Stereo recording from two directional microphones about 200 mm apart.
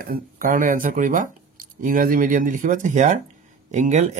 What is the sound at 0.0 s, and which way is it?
Speech, 45° right (ahead or behind).